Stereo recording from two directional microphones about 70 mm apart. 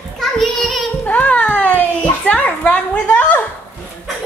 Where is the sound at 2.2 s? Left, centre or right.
Left.